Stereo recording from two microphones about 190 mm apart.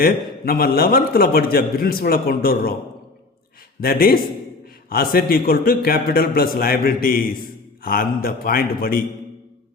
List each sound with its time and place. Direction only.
0.0 s a man's voice: 50° left (ahead or behind)
3.8 s a man's voice: 50° left (ahead or behind)